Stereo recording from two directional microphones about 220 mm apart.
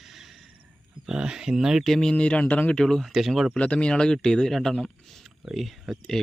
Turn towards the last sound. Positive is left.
turn(degrees=0)  # may be behind; listen again after turning